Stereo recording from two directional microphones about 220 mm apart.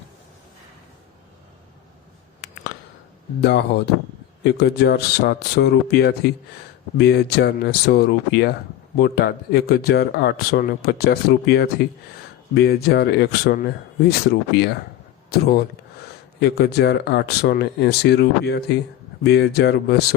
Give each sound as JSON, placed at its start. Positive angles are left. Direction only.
{"t": 3.4, "sound": "speech", "side_deg": 50}